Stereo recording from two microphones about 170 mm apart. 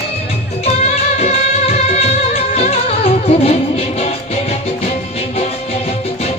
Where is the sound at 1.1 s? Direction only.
35° left (ahead or behind).